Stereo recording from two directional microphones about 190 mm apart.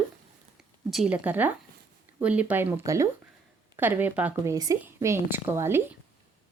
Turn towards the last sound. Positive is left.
turn(degrees=-15)  # may be behind; listen again after turning